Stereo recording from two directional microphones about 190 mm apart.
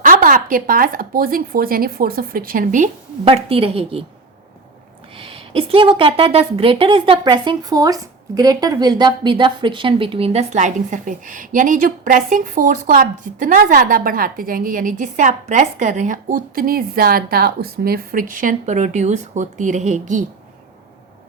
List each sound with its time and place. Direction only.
0.0 s speech: 45° right (ahead or behind)
3.2 s a woman's voice: 30° right (ahead or behind)
5.1 s a woman's voice: 30° right (ahead or behind)